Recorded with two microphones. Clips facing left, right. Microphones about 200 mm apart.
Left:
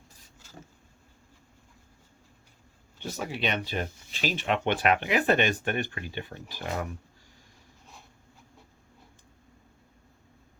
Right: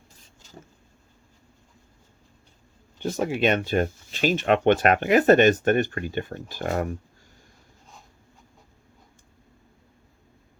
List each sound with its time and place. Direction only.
3.0 s speech: 50° right (ahead or behind)